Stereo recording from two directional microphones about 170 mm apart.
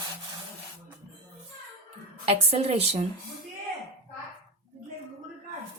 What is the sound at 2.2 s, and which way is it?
Speech, 40° right (ahead or behind).